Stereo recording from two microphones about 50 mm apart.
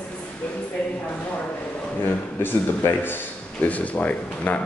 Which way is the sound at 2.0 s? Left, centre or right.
Left.